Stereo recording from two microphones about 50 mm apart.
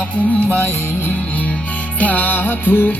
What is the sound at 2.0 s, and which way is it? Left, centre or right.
Music, left.